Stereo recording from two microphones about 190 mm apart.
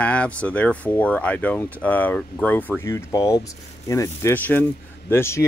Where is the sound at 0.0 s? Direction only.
5° left (ahead or behind).